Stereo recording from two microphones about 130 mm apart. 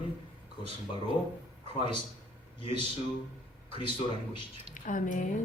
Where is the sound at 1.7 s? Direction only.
40° left (ahead or behind).